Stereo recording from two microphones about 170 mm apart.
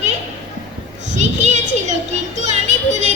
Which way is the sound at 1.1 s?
45° right (ahead or behind).